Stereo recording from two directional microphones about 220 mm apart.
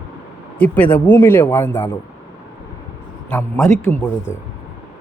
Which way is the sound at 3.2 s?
10° left (ahead or behind).